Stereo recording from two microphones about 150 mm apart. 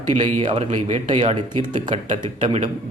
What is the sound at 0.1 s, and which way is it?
Speech, 40° right (ahead or behind).